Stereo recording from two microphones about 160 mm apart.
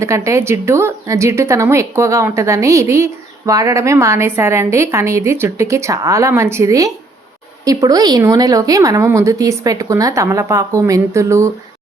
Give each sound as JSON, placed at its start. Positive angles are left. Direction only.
{"t": 0.0, "sound": "speech", "side_deg": -20}